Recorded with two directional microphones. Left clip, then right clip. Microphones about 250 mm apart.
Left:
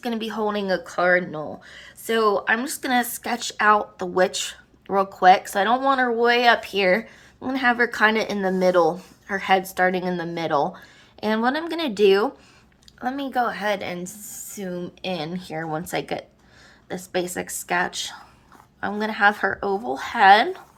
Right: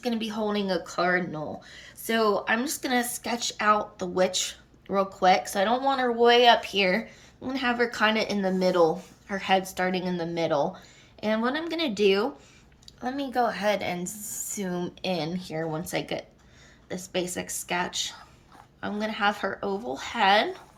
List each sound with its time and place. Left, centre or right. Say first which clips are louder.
0.0 s speech: left 4 dB; centre